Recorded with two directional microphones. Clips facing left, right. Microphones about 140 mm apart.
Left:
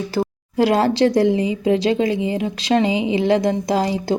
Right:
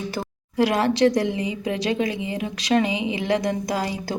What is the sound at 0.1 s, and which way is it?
A woman's voice, 30° left (ahead or behind).